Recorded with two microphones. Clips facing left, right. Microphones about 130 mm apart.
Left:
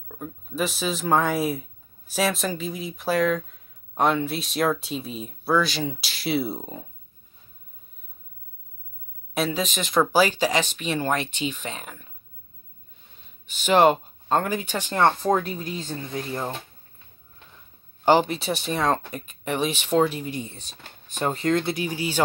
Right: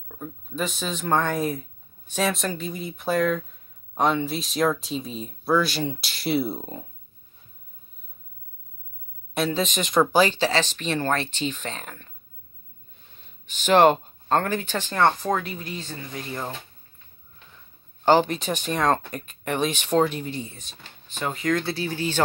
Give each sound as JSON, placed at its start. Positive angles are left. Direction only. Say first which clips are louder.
{"t": 0.1, "sound": "speech", "louder": "left 1 dB", "side_deg": 5}
{"t": 9.3, "sound": "speech", "louder": "right 1 dB", "side_deg": 5}
{"t": 13.5, "sound": "speech", "louder": "right 1 dB", "side_deg": 10}
{"t": 15.4, "sound": "speech", "louder": "left 3 dB", "side_deg": 0}
{"t": 16.3, "sound": "speech", "louder": "left 1 dB", "side_deg": 15}
{"t": 18.3, "sound": "speech", "louder": "even", "side_deg": 5}
{"t": 20.3, "sound": "speech", "louder": "left 1 dB", "side_deg": 20}
{"t": 20.6, "sound": "speech", "louder": "left 1 dB", "side_deg": 40}